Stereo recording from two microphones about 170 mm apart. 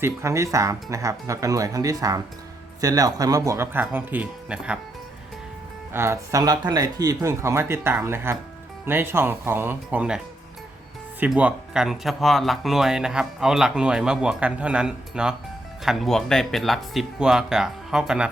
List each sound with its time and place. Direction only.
0.0 s speech: 15° right (ahead or behind)
5.9 s speech: 15° right (ahead or behind)
11.2 s speech: 10° right (ahead or behind)